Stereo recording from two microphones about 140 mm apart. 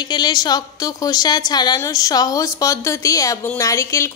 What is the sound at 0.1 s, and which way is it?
A woman's voice, 30° left (ahead or behind).